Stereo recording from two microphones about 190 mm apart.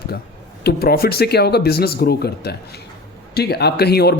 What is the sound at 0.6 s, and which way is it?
Speech, 55° left (ahead or behind).